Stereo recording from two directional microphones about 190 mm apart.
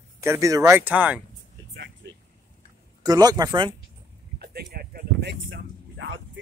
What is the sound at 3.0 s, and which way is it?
Speech, 20° right (ahead or behind).